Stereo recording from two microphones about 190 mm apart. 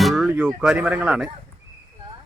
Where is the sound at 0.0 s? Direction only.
Centre (ahead or behind).